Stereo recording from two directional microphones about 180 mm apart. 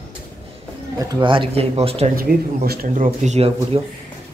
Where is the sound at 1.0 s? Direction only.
20° right (ahead or behind).